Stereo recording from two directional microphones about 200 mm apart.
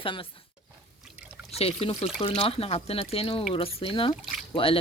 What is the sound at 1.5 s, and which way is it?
Speech, 30° left (ahead or behind).